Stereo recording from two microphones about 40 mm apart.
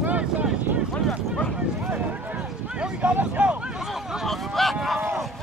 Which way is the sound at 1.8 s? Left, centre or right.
Right.